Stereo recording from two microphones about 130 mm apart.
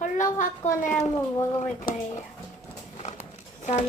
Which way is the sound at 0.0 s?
75° left (ahead or behind).